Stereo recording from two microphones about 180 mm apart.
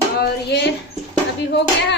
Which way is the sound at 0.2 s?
70° left (ahead or behind).